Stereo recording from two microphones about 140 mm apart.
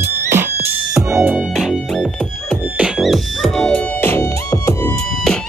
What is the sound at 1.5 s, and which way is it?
Music, centre (ahead or behind).